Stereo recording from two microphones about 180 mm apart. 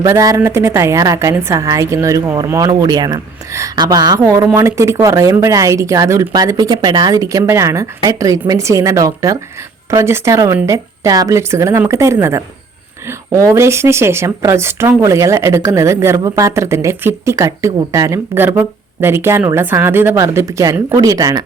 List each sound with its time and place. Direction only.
0.0 s a woman's voice: 20° right (ahead or behind)